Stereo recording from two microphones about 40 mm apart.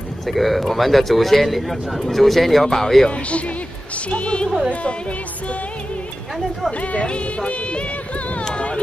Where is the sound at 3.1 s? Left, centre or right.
Left.